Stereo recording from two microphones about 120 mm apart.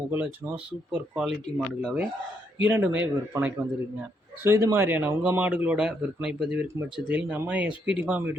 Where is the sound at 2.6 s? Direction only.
15° right (ahead or behind).